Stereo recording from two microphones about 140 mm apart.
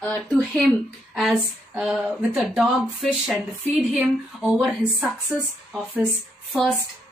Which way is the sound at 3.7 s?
5° right (ahead or behind).